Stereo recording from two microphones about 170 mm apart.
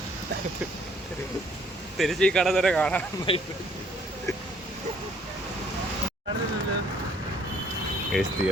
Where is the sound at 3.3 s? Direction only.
30° left (ahead or behind).